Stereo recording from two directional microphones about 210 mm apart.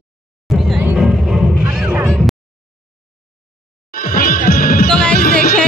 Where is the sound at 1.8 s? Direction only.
5° right (ahead or behind).